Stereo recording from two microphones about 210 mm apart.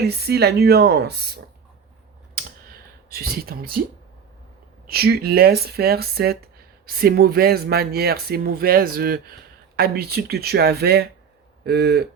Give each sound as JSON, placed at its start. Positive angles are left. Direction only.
{"t": 0.0, "sound": "speech", "side_deg": -50}
{"t": 3.1, "sound": "speech", "side_deg": -45}
{"t": 4.9, "sound": "speech", "side_deg": -45}